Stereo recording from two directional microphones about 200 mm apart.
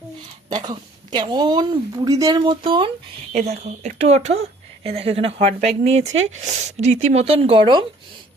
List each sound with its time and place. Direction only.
0.5 s a woman's voice: 20° right (ahead or behind)